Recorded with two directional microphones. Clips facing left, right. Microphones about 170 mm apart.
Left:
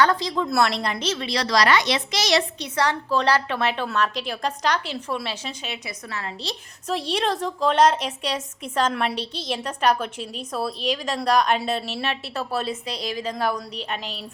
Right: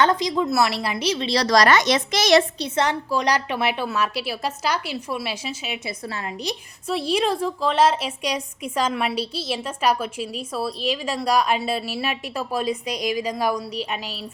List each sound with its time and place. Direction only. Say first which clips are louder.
0.0 s a woman's voice: right 1 dB; 20° right (ahead or behind)
0.5 s a woman's voice: even; 5° right (ahead or behind)
1.2 s a woman's voice: right 4 dB; 35° right (ahead or behind); by 2.4 s 50° right (ahead or behind)
2.6 s a woman's voice: right 1 dB; 20° right (ahead or behind)
6.9 s a woman's voice: right 2 dB; 5° right (ahead or behind)